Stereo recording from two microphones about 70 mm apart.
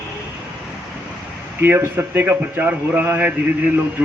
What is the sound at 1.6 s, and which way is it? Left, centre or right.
A man's voice, right.